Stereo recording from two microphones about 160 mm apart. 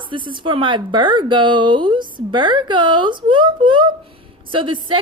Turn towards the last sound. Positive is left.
turn(degrees=-35)  # may be behind; listen again after turning